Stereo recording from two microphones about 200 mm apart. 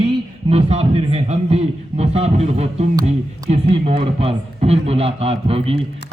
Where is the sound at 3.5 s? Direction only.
30° right (ahead or behind).